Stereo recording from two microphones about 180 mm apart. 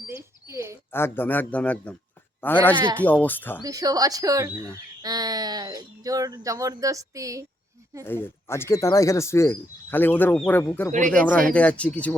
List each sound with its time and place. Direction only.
0.1 s a sound: 15° right (ahead or behind)
0.9 s speech: 10° left (ahead or behind)
3.6 s speech: 20° right (ahead or behind)
8.0 s speech: 10° left (ahead or behind)